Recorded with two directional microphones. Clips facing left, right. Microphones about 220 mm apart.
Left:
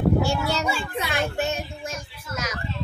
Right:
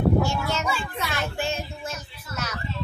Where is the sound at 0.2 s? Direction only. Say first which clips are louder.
Left 2 dB; 35° left (ahead or behind).